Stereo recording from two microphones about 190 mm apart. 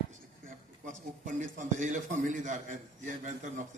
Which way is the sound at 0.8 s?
40° right (ahead or behind).